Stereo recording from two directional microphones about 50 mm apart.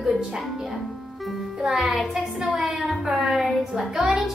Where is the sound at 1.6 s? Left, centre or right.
Centre.